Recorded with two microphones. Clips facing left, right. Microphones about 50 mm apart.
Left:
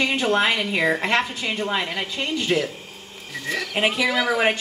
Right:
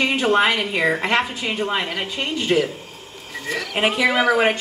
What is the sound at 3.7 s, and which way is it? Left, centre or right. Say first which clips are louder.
Speech: right 3 dB; centre.